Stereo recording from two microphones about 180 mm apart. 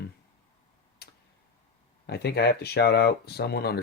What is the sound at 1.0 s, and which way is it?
Tick-tock, 65° left (ahead or behind).